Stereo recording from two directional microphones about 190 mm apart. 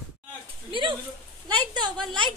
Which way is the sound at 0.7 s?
25° right (ahead or behind).